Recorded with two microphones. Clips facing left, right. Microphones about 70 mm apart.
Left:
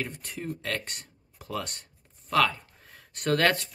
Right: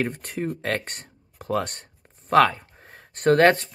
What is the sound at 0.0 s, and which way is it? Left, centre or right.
Speech, right.